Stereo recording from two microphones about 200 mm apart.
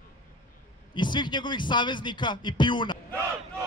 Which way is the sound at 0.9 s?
25° left (ahead or behind).